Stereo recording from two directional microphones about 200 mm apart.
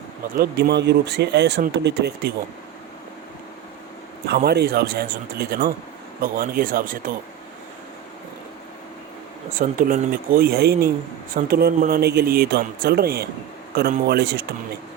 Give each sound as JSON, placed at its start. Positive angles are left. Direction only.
{"t": 0.3, "sound": "speech", "side_deg": -50}
{"t": 4.3, "sound": "a man's voice", "side_deg": -50}
{"t": 9.6, "sound": "a man's voice", "side_deg": -45}